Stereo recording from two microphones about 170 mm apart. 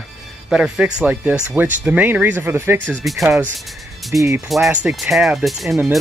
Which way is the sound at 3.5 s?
Centre (ahead or behind).